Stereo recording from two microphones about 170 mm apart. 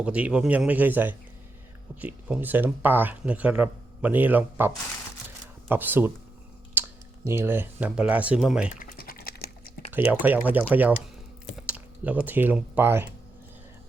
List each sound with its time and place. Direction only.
0.0 s speech: 5° right (ahead or behind)
8.8 s typing: 60° left (ahead or behind)
9.9 s speech: 10° right (ahead or behind)